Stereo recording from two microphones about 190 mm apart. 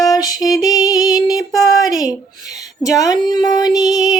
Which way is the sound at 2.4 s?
20° left (ahead or behind).